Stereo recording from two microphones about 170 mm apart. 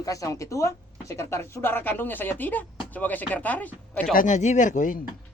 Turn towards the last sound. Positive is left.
turn(degrees=50)  # may be behind; listen again after turning